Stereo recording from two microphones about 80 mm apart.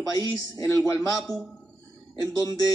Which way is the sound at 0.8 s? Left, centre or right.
Left.